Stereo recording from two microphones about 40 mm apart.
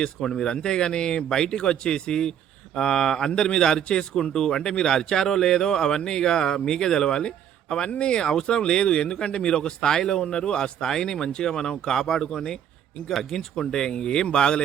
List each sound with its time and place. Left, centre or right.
0.0 s a man's voice: centre